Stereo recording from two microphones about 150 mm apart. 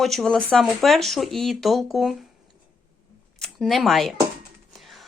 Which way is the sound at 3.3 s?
Centre (ahead or behind).